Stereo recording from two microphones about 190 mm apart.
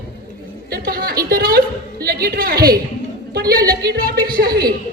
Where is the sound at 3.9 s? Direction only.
50° right (ahead or behind).